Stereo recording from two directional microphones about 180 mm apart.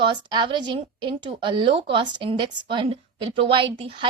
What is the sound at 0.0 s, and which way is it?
A woman's voice, 25° right (ahead or behind).